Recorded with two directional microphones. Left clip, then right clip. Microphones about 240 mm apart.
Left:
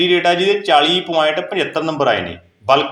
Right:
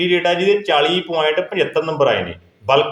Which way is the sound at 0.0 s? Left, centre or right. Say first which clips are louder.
Left 2 dB; centre.